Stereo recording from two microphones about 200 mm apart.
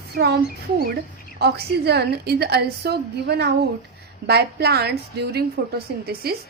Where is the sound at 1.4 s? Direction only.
55° right (ahead or behind).